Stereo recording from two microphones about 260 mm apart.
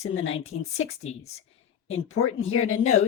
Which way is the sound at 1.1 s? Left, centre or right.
Left.